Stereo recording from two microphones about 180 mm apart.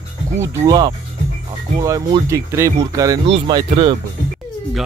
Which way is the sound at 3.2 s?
30° right (ahead or behind).